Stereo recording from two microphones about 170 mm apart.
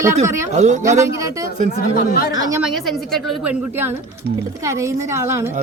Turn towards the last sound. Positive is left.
turn(degrees=-15)  # may be behind; listen again after turning